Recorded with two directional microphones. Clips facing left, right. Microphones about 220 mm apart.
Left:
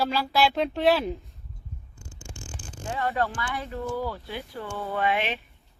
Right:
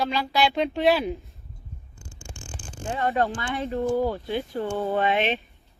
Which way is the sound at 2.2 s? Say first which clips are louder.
Even; 55° right (ahead or behind).